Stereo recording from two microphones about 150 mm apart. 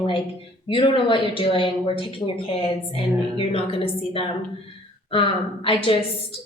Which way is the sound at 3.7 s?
40° left (ahead or behind).